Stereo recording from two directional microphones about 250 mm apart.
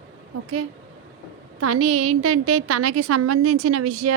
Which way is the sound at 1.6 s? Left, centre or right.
Right.